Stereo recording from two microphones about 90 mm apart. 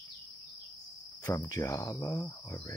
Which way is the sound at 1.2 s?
40° left (ahead or behind).